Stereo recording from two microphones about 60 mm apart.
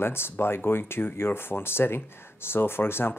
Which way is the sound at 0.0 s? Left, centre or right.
Left.